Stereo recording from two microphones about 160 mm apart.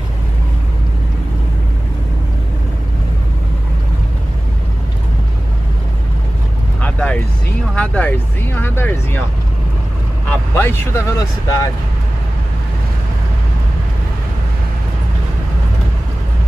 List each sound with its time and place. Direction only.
6.8 s vehicle: 10° left (ahead or behind)
7.7 s a sound: 10° left (ahead or behind)
10.5 s speech: 15° left (ahead or behind)